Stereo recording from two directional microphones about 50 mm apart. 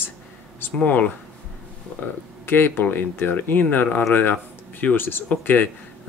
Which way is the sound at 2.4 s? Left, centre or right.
Left.